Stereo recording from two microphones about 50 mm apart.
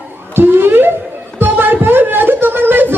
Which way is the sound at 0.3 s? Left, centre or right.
Right.